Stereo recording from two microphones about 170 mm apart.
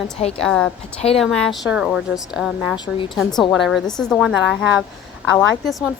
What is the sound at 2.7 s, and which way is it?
Speech, 25° left (ahead or behind).